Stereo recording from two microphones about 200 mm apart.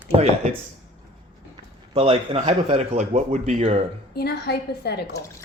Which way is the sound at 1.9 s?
30° right (ahead or behind).